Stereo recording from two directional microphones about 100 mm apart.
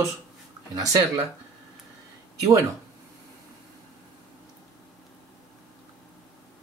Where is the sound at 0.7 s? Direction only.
35° right (ahead or behind).